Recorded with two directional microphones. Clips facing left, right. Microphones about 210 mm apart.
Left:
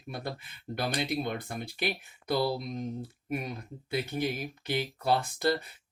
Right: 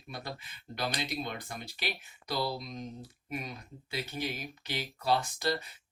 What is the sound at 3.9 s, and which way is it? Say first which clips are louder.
Speech: left 6 dB; 55° left (ahead or behind).